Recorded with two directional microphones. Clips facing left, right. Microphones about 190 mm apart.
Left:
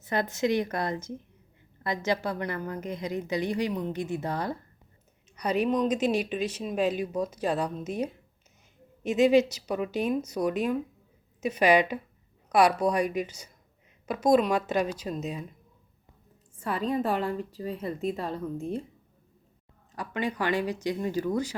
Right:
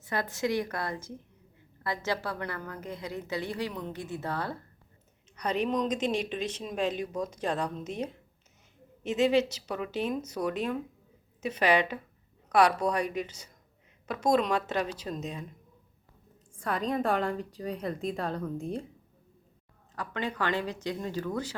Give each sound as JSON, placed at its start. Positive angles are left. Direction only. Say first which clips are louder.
{"t": 0.0, "sound": "a woman's voice", "louder": "left 4 dB", "side_deg": 20}
{"t": 16.6, "sound": "a woman's voice", "louder": "left 2 dB", "side_deg": 5}
{"t": 20.0, "sound": "a woman's voice", "louder": "left 2 dB", "side_deg": 10}